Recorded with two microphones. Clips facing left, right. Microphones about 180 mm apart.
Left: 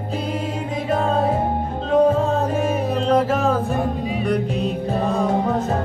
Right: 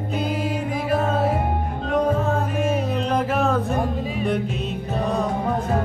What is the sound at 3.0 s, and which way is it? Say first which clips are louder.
Music: left 5 dB; 35° left (ahead or behind).